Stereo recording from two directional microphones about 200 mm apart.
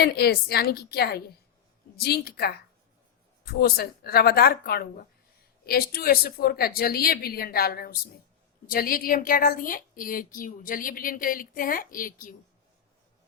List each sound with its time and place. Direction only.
0.0 s a woman's voice: 50° left (ahead or behind)